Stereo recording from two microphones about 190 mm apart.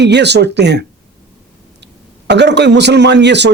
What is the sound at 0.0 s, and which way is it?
Speech, 65° right (ahead or behind).